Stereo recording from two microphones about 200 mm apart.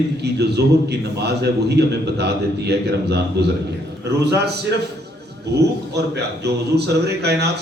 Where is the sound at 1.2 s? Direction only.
55° right (ahead or behind).